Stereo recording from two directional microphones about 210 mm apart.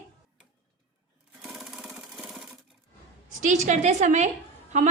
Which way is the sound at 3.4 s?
35° right (ahead or behind).